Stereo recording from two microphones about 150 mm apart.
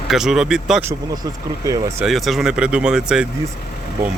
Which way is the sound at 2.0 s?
Centre (ahead or behind).